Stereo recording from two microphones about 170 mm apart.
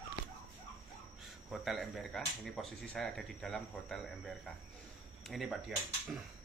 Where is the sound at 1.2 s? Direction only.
Centre (ahead or behind).